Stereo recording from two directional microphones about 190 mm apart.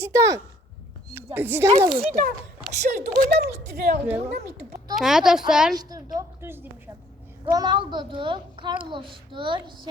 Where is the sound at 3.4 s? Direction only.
60° right (ahead or behind).